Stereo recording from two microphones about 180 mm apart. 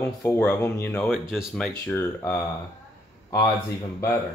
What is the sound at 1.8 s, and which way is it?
Speech, 15° left (ahead or behind).